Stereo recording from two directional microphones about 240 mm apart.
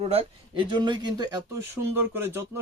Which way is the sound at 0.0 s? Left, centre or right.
Right.